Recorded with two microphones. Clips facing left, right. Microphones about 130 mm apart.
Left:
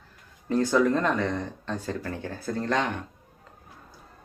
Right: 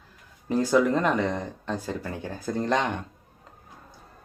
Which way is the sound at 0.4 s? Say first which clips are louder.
Right 1 dB; 10° right (ahead or behind).